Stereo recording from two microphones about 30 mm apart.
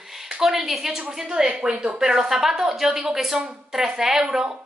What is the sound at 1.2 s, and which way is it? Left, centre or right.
Speech, right.